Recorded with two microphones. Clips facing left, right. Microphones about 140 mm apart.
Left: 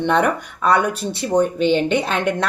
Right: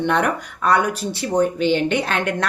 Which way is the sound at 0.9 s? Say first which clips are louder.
Left 1 dB; 60° left (ahead or behind).